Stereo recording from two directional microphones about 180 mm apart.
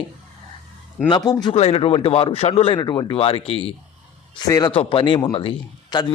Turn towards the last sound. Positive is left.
turn(degrees=25)  # may be behind; listen again after turning